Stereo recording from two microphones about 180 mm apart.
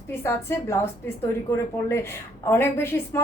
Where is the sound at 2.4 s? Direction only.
15° left (ahead or behind).